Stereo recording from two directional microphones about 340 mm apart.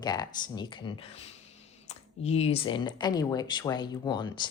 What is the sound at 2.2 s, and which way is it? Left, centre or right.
Speech, centre.